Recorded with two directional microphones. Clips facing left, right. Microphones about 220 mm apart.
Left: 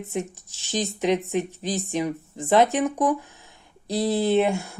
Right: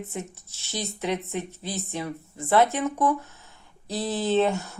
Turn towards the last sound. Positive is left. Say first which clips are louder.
# left 2 dB
turn(degrees=10)  # may be behind; listen again after turning